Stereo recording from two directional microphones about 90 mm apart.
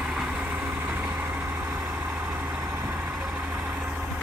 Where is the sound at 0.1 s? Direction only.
10° right (ahead or behind).